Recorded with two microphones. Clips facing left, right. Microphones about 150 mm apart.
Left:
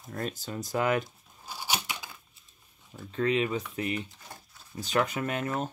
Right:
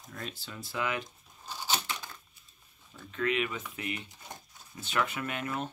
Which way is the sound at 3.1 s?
35° left (ahead or behind).